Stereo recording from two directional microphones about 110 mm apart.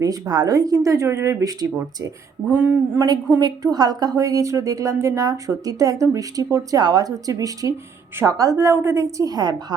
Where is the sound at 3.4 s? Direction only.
40° right (ahead or behind).